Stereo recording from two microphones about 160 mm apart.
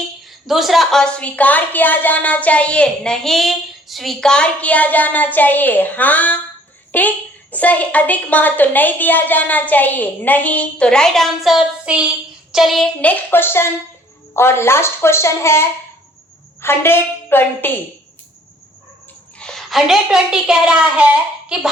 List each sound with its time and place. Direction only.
0.3 s a woman's voice: centre (ahead or behind)
19.4 s a woman's voice: 5° left (ahead or behind)